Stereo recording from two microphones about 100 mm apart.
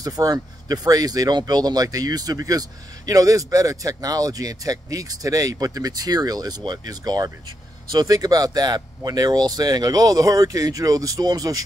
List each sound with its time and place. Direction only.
0.0 s speech: 40° right (ahead or behind)